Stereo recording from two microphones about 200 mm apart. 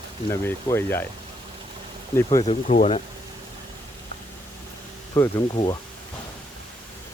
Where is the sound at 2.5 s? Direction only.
35° left (ahead or behind).